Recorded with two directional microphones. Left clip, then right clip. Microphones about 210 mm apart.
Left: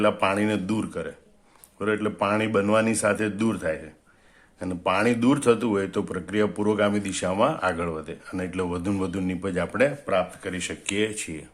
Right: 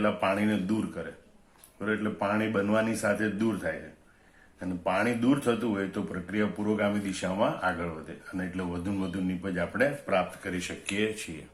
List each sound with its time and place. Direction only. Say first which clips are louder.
0.0 s speech: left 5 dB; 50° left (ahead or behind)